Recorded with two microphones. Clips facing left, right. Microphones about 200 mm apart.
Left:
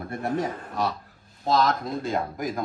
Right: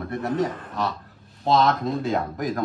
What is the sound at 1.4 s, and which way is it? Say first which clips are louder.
Speech: right 3 dB; centre (ahead or behind).